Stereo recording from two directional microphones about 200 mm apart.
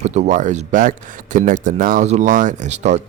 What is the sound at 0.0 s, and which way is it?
Speech, 35° right (ahead or behind).